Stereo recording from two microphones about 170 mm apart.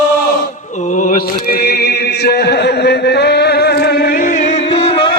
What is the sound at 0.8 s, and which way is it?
Mantra, 50° left (ahead or behind).